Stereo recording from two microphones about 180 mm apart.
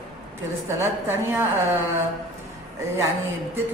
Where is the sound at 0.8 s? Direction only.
15° right (ahead or behind).